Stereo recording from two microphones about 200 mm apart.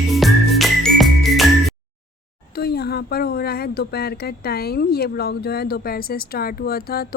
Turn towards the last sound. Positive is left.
turn(degrees=50)  # may be behind; listen again after turning